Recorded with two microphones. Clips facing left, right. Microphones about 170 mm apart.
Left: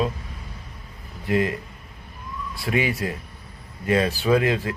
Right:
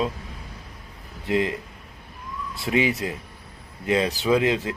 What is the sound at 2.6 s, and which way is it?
Speech, 20° right (ahead or behind).